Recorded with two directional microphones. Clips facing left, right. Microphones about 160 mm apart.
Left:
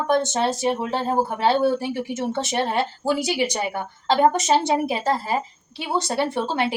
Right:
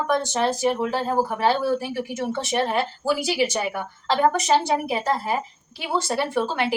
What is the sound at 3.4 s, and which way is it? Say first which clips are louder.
Speech: right 1 dB; 25° left (ahead or behind).